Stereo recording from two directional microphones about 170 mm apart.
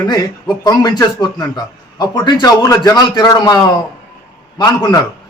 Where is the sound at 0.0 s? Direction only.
25° left (ahead or behind).